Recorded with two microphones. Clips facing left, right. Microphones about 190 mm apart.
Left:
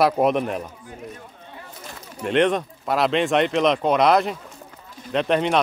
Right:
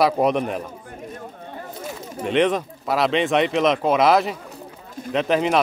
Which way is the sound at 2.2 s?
Centre (ahead or behind).